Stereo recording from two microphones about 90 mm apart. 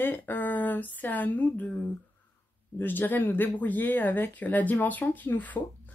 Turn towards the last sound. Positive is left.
turn(degrees=20)  # may be behind; listen again after turning